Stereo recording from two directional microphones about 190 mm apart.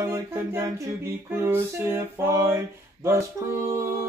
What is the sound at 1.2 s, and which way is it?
A capella, 10° right (ahead or behind).